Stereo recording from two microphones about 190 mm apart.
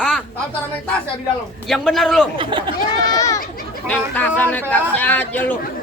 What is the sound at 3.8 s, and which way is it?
Speech, 10° left (ahead or behind).